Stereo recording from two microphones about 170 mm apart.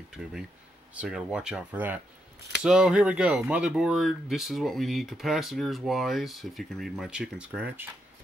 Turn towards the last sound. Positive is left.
turn(degrees=-10)  # may be behind; listen again after turning